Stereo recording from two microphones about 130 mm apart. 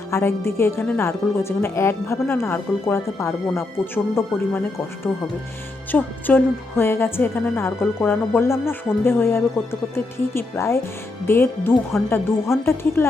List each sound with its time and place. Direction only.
0.1 s speech: 20° left (ahead or behind)
5.9 s speech: 15° left (ahead or behind)